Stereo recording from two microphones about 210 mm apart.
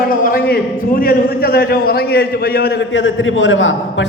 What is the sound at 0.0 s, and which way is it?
A man's voice, 45° left (ahead or behind).